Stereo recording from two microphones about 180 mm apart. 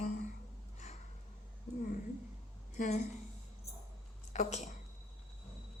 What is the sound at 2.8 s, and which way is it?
Speech, 40° left (ahead or behind).